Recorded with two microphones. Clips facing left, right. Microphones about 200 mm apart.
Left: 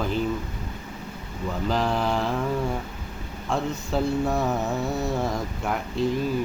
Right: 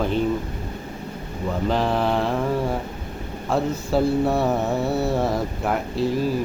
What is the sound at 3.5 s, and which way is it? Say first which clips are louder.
Mantra: right 5 dB; 5° right (ahead or behind).